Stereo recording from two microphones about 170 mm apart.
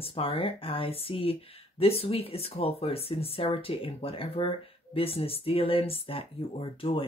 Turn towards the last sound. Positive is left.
turn(degrees=30)  # may be behind; listen again after turning